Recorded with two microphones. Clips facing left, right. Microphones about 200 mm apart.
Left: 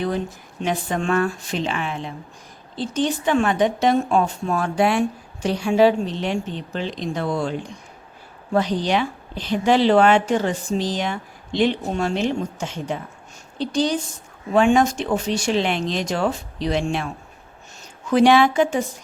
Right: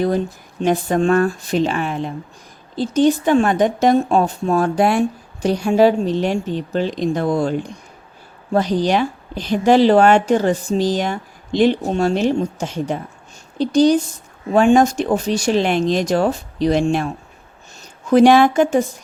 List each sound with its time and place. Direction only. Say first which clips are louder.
0.6 s speech: right 7 dB; 45° right (ahead or behind)
8.5 s speech: right 4 dB; 40° right (ahead or behind)
18.1 s speech: right 4 dB; 45° right (ahead or behind)